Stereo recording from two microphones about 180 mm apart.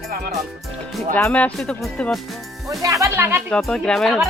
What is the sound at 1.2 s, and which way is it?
Speech, 10° left (ahead or behind).